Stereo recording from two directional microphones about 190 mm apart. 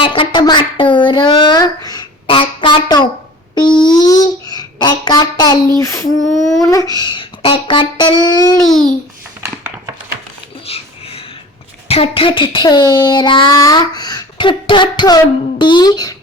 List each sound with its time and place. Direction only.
0.0 s child singing: 25° left (ahead or behind)
3.5 s music: 25° left (ahead or behind)
3.9 s a child's voice: 20° left (ahead or behind)
5.8 s child singing: 15° left (ahead or behind)
6.3 s a sound: centre (ahead or behind)
6.6 s child singing: 20° left (ahead or behind)
6.9 s speech: 25° left (ahead or behind)
8.6 s a sound: centre (ahead or behind)
10.7 s speech: 30° left (ahead or behind)
11.9 s speech: 30° left (ahead or behind)